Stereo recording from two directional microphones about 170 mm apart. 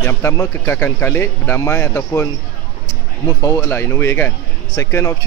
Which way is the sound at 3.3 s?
20° left (ahead or behind).